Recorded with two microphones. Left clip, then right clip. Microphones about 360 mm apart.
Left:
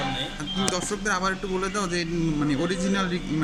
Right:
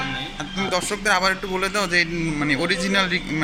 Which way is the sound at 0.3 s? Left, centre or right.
Centre.